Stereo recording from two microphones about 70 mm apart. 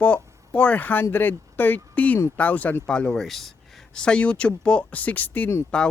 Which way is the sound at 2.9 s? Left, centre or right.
Centre.